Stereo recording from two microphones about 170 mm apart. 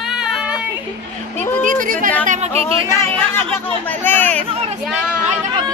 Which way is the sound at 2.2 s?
40° right (ahead or behind).